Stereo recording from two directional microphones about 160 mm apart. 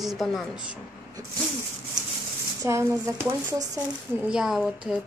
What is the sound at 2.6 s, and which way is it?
Speech, 20° right (ahead or behind).